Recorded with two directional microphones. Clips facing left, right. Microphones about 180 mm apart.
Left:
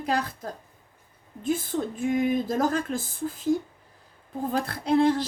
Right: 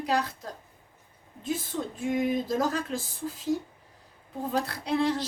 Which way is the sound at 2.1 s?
50° left (ahead or behind).